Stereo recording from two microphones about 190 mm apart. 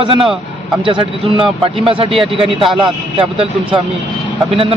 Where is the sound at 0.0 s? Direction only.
25° right (ahead or behind).